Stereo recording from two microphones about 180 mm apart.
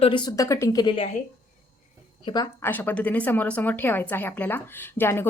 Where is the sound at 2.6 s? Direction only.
10° left (ahead or behind).